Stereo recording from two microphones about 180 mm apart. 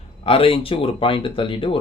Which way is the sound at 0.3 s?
30° left (ahead or behind).